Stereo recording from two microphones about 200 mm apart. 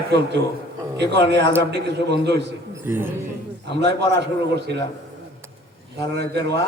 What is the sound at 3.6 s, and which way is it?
A man's voice, 60° right (ahead or behind).